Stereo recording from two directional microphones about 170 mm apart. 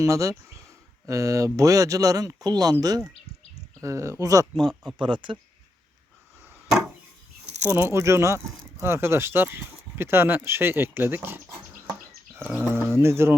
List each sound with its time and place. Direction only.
0.0 s speech: 20° right (ahead or behind)
3.8 s speech: 15° right (ahead or behind)
6.5 s a sound: 5° right (ahead or behind)
7.7 s speech: 15° right (ahead or behind)